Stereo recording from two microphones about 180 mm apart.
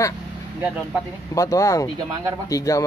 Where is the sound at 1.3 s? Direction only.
20° left (ahead or behind).